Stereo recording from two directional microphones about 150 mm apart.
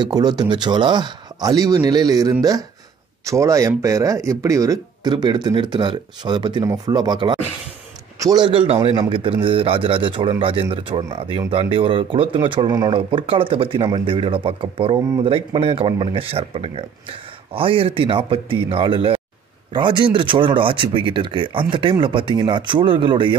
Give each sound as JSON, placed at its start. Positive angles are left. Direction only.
{"t": 0.0, "sound": "speech", "side_deg": -25}